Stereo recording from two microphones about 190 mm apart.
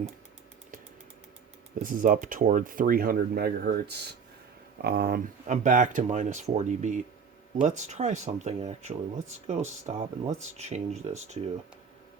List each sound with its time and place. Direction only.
1.8 s speech: 45° right (ahead or behind)